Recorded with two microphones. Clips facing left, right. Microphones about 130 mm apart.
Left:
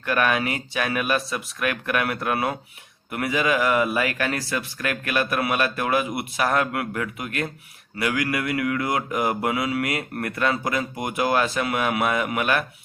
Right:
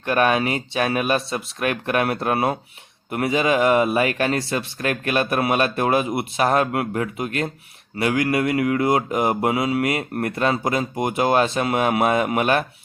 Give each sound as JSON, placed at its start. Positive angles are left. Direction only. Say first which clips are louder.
{"t": 0.0, "sound": "mantra", "louder": "right 4 dB", "side_deg": -25}